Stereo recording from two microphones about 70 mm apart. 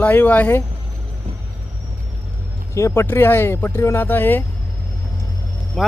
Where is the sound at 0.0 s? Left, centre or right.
Left.